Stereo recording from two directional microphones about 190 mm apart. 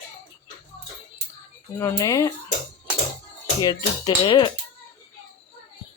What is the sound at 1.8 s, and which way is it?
Cutlery, 15° left (ahead or behind).